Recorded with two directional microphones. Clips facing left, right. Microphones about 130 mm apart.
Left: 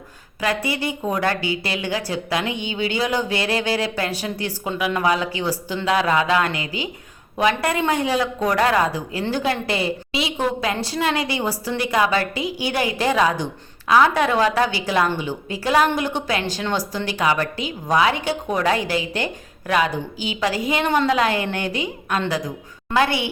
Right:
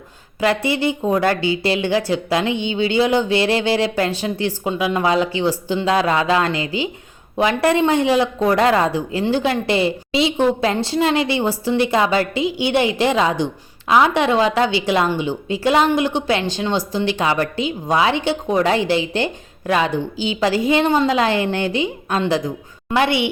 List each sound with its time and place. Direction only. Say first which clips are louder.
0.3 s a woman's voice: right 5 dB; 25° right (ahead or behind)